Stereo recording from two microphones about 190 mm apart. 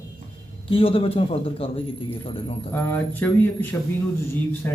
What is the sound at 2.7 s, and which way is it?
Speech, 10° left (ahead or behind).